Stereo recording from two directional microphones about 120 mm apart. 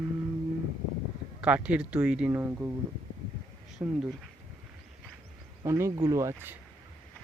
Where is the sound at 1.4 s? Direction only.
10° right (ahead or behind).